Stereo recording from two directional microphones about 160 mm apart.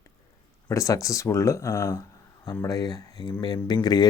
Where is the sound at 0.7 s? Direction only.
20° left (ahead or behind).